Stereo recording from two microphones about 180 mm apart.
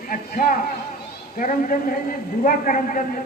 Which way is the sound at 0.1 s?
50° left (ahead or behind).